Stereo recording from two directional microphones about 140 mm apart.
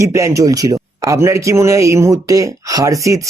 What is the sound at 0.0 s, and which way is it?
Speech, 20° right (ahead or behind).